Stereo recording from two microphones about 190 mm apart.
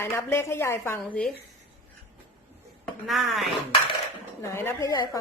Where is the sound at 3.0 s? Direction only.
Centre (ahead or behind).